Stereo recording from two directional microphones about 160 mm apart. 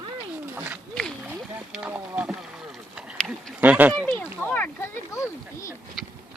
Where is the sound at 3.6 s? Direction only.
10° right (ahead or behind).